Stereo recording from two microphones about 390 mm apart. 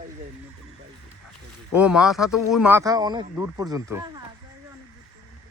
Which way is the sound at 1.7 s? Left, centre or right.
Centre.